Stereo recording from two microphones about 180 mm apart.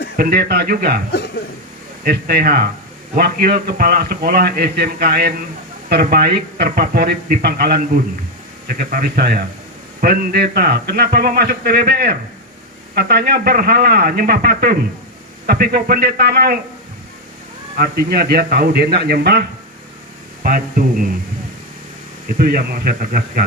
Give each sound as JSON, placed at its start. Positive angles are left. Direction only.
{"t": 0.2, "sound": "a man's voice", "side_deg": -55}
{"t": 2.0, "sound": "a man's voice", "side_deg": -55}
{"t": 17.7, "sound": "a man's voice", "side_deg": -60}
{"t": 22.4, "sound": "a man's voice", "side_deg": -55}